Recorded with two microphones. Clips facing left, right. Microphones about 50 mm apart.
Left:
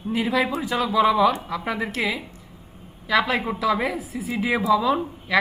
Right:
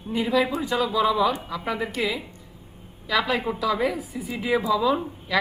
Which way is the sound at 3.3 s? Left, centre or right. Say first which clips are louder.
Left 1 dB; centre.